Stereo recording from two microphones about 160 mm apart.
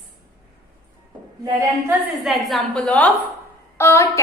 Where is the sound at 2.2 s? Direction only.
Centre (ahead or behind); by 4.1 s 15° left (ahead or behind).